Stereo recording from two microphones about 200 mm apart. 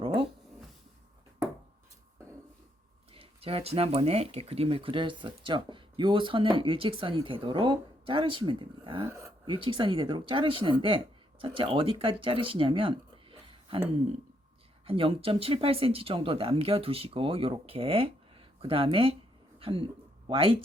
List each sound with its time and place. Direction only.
0.0 s a sound: 25° right (ahead or behind)
3.2 s speech: 30° right (ahead or behind)
9.0 s speech: 15° right (ahead or behind)
9.6 s speech: 25° right (ahead or behind)
14.8 s speech: 25° right (ahead or behind)